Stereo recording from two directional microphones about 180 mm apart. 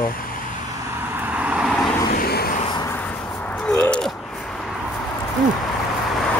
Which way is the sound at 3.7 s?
5° left (ahead or behind).